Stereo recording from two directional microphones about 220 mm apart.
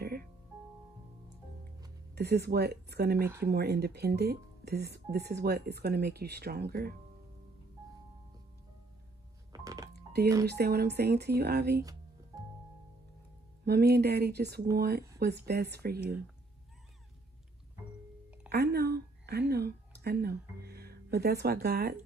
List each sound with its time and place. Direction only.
0.0 s music: 45° right (ahead or behind)
2.1 s speech: 50° right (ahead or behind)
9.5 s telephone dialing: 15° right (ahead or behind)
9.9 s a sound: 50° right (ahead or behind)
10.4 s speech: 45° right (ahead or behind)
13.7 s speech: 45° right (ahead or behind)
18.5 s a sound: 45° right (ahead or behind)